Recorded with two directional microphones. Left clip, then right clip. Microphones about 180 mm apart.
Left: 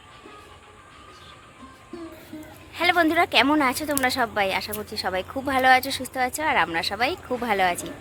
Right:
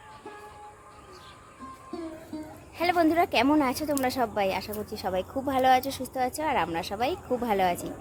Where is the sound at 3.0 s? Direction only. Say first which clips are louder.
Left 3 dB; centre (ahead or behind).